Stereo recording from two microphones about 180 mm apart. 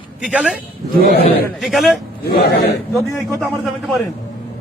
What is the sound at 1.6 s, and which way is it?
Speech, centre (ahead or behind).